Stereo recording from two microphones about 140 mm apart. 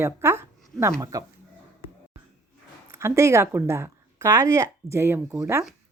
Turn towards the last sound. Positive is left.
turn(degrees=-15)  # may be behind; listen again after turning